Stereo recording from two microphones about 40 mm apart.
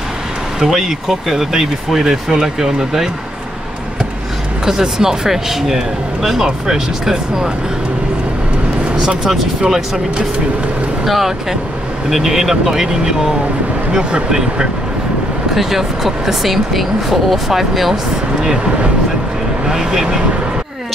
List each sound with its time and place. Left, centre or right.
0.6 s speech: centre
4.6 s speech: centre
9.2 s speech: centre
11.1 s speech: centre
13.9 s speech: centre
15.5 s speech: centre
18.4 s speech: centre
19.7 s speech: centre